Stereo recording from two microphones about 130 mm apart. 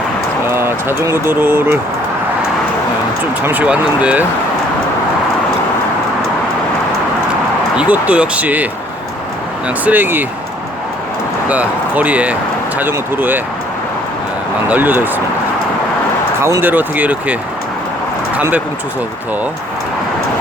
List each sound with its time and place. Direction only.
0.5 s speech: 20° right (ahead or behind)
3.4 s speech: 10° right (ahead or behind)
7.8 s speech: 10° right (ahead or behind)
9.6 s speech: 15° right (ahead or behind)
11.4 s speech: 10° right (ahead or behind)
14.7 s speech: 15° right (ahead or behind)
16.4 s speech: 20° right (ahead or behind)
18.3 s speech: 15° right (ahead or behind)